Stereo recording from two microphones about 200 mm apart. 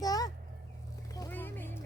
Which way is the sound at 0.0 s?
20° left (ahead or behind).